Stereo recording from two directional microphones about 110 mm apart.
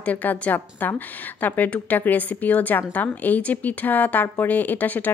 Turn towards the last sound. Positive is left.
turn(degrees=15)  # may be behind; listen again after turning